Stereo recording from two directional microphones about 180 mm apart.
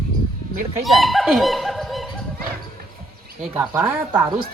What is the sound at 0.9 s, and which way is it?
Speech, centre (ahead or behind).